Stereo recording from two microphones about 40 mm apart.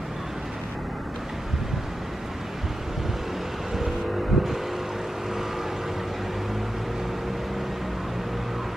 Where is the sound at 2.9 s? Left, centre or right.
Centre.